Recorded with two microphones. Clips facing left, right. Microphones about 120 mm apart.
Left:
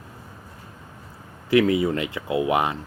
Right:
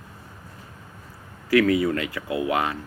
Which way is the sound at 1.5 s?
20° left (ahead or behind).